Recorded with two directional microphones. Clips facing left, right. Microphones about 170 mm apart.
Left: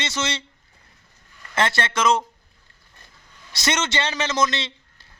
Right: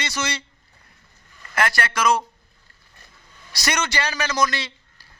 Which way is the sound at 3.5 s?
25° left (ahead or behind).